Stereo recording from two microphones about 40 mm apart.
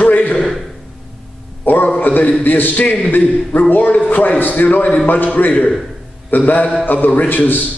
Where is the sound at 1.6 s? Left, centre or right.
Left.